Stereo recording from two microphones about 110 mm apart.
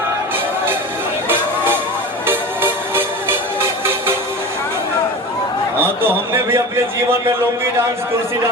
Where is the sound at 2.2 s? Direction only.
20° right (ahead or behind).